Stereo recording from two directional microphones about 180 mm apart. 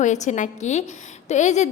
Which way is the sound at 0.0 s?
40° left (ahead or behind).